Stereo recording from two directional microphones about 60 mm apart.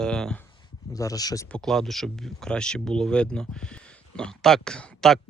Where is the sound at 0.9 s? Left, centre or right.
Left.